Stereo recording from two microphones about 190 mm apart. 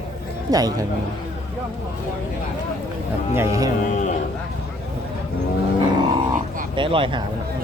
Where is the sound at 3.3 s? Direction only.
15° right (ahead or behind).